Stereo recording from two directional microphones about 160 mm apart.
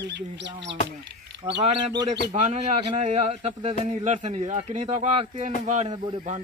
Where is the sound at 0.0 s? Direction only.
90° right.